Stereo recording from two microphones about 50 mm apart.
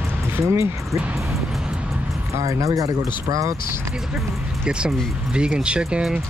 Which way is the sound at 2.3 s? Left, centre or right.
Right.